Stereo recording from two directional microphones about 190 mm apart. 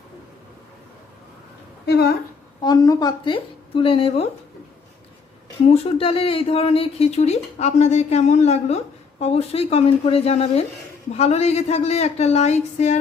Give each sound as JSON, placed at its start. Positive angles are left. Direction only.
{"t": 1.9, "sound": "speech", "side_deg": 60}
{"t": 2.6, "sound": "speech", "side_deg": 20}
{"t": 5.6, "sound": "speech", "side_deg": 30}